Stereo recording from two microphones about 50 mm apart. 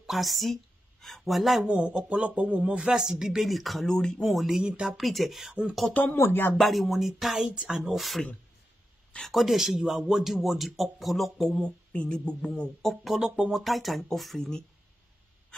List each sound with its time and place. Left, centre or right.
0.0 s a woman's voice: centre
1.6 s speech: right
2.9 s speech: centre
4.6 s speech: centre
4.9 s speech: centre
5.5 s speech: centre
6.6 s speech: centre
7.4 s speech: centre
7.7 s speech: centre
9.3 s speech: centre
11.6 s speech: left
12.8 s speech: centre